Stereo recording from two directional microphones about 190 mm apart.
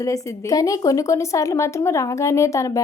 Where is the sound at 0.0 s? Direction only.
15° left (ahead or behind).